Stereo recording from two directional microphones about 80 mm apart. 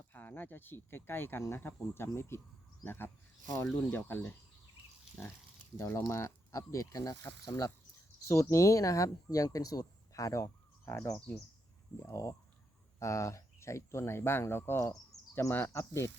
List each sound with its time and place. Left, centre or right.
0.1 s speech: left
3.4 s speech: left
3.9 s speech: left
5.7 s speech: left
8.3 s speech: left
10.8 s speech: left
11.9 s speech: left